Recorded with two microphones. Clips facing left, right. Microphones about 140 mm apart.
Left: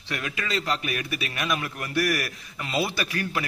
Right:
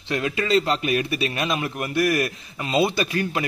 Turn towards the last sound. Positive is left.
turn(degrees=-25)  # may be behind; listen again after turning